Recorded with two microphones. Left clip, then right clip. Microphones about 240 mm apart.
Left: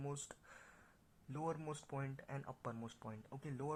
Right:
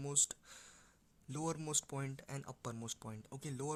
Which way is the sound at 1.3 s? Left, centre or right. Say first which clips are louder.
Right 4 dB; right.